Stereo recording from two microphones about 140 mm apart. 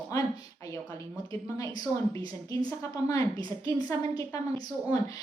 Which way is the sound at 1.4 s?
25° left (ahead or behind).